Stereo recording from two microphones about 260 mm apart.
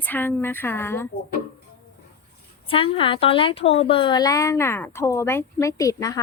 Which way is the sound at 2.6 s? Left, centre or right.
Left.